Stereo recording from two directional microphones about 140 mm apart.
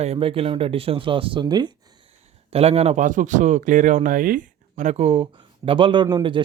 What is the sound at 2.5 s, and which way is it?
Speech, 45° right (ahead or behind).